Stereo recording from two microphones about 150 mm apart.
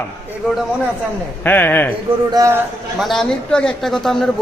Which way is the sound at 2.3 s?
20° right (ahead or behind).